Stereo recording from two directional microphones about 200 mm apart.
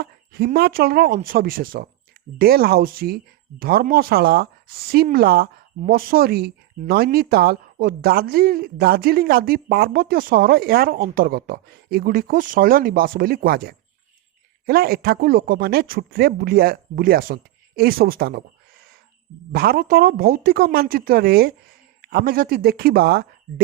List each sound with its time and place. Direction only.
0.0 s speech: 50° right (ahead or behind)
19.5 s speech: 50° right (ahead or behind)